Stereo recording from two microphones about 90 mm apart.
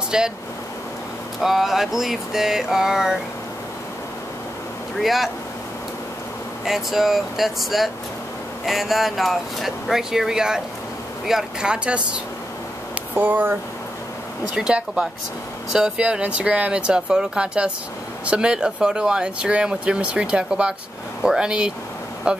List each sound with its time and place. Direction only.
0.1 s speech: 10° right (ahead or behind)
1.4 s speech: centre (ahead or behind)
5.0 s speech: centre (ahead or behind)
6.6 s speech: 5° right (ahead or behind); by 13.6 s 20° right (ahead or behind)
14.5 s speech: 10° right (ahead or behind)